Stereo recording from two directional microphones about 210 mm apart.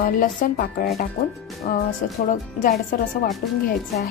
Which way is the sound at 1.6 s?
40° left (ahead or behind).